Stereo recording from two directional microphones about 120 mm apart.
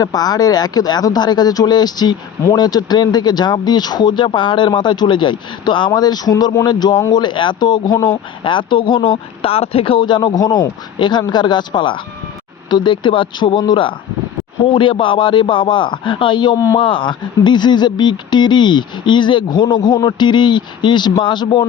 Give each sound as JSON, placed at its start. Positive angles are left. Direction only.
{"t": 0.0, "sound": "speech", "side_deg": 35}